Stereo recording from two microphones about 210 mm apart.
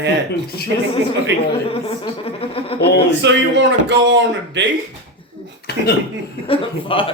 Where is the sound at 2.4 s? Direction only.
25° left (ahead or behind).